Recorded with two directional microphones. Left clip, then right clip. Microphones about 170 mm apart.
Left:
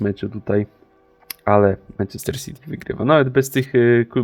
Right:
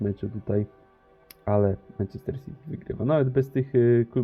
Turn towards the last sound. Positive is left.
turn(degrees=25)  # may be behind; listen again after turning